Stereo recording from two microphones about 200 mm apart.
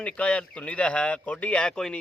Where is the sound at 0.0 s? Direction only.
5° left (ahead or behind).